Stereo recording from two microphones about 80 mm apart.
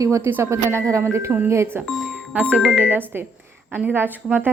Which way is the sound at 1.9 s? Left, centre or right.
Centre.